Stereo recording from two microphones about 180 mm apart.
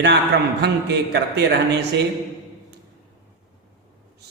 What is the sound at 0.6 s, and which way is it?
Speech, 70° right (ahead or behind).